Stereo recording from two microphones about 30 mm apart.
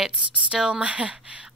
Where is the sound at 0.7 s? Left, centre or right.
Right.